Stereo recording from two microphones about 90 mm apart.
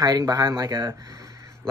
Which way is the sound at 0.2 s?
45° right (ahead or behind).